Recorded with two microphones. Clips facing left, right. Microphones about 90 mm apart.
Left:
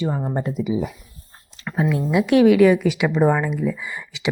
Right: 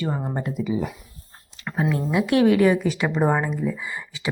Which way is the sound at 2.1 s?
25° right (ahead or behind).